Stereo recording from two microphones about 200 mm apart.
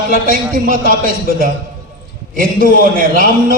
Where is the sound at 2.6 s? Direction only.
45° right (ahead or behind).